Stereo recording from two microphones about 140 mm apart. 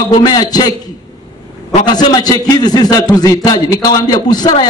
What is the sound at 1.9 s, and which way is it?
A man's voice, 30° left (ahead or behind).